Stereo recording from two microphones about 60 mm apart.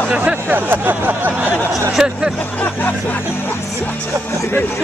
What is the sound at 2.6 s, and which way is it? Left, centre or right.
Speech, left.